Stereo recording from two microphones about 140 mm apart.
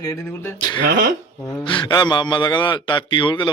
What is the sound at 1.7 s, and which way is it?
Speech, 30° left (ahead or behind).